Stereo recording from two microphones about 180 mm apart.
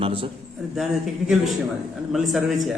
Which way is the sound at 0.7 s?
Centre (ahead or behind).